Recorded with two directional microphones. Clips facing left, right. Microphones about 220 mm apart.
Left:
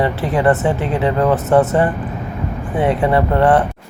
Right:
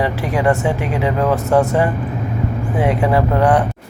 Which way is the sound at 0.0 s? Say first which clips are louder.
Left 2 dB; 5° right (ahead or behind).